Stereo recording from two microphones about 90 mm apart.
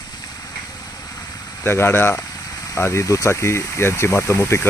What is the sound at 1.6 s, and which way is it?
Speech, 25° left (ahead or behind).